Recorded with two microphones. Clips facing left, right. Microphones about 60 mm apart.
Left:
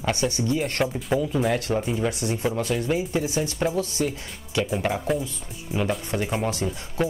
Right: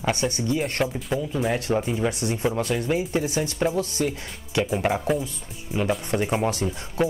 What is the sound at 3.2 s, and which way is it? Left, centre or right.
Speech, right.